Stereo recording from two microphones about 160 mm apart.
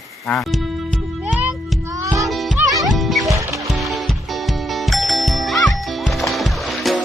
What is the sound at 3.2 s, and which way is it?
Music, 20° right (ahead or behind).